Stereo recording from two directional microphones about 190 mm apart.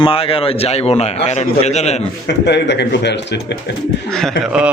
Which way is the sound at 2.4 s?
65° left (ahead or behind).